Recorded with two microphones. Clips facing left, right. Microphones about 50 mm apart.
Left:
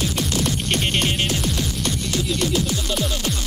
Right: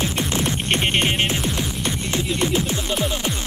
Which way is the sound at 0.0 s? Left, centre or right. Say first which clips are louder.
Right 1 dB; right.